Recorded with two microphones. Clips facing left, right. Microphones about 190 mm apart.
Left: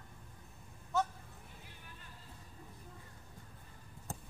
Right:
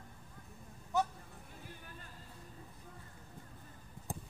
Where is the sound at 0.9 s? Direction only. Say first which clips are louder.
Right 1 dB; 15° right (ahead or behind).